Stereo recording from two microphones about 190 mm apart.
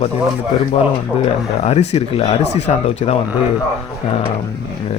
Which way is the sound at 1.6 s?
35° left (ahead or behind).